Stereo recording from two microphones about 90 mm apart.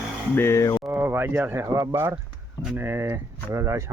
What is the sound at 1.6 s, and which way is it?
Speech, 40° right (ahead or behind).